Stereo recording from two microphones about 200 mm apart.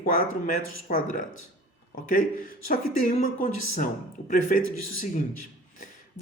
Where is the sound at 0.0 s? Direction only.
45° left (ahead or behind).